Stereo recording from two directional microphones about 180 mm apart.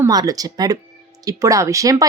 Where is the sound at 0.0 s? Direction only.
20° right (ahead or behind).